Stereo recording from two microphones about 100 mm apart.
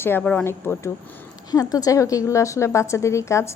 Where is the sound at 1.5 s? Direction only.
40° left (ahead or behind).